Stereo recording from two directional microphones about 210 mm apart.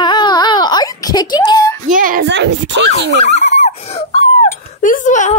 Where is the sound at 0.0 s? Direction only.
20° left (ahead or behind).